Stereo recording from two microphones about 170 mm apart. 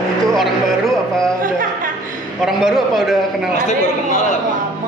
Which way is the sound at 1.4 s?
55° right (ahead or behind).